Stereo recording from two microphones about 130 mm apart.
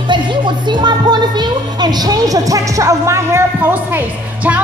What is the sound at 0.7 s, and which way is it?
A woman's voice, 35° right (ahead or behind).